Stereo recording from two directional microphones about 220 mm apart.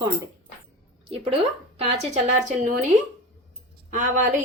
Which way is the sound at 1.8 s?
30° right (ahead or behind).